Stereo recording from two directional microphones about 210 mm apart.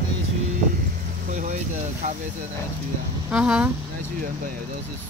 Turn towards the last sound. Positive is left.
turn(degrees=-5)  # may be behind; listen again after turning